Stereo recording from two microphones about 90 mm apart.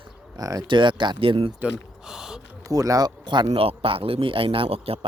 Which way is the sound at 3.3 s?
75° right (ahead or behind).